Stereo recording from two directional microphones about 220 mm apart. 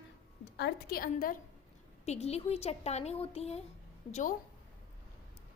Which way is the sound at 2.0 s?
30° left (ahead or behind).